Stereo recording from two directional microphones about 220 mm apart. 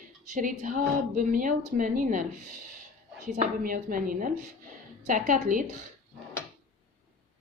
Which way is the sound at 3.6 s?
40° right (ahead or behind).